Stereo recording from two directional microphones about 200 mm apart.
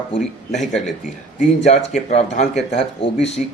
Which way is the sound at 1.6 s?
35° left (ahead or behind).